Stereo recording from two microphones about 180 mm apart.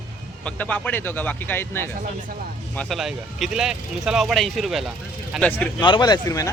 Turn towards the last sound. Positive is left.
turn(degrees=20)  # may be behind; listen again after turning